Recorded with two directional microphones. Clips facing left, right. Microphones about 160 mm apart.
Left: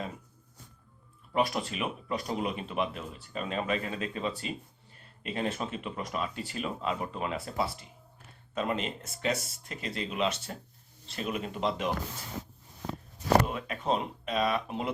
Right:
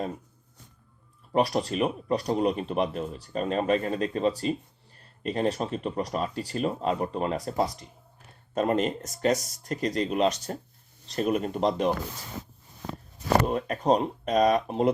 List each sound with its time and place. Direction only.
1.3 s speech: 35° right (ahead or behind)
13.4 s speech: 40° right (ahead or behind)